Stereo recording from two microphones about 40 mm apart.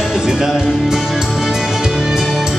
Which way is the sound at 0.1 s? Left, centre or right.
Centre.